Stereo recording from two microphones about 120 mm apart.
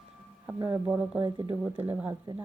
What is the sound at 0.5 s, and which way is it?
Speech, 20° right (ahead or behind).